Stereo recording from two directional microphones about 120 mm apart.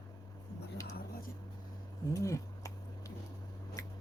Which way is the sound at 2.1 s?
25° left (ahead or behind).